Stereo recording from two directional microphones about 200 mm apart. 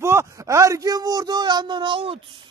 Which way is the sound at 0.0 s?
15° right (ahead or behind).